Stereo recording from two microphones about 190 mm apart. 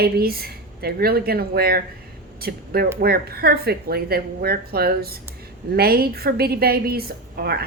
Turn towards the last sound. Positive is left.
turn(degrees=-55)  # may be behind; listen again after turning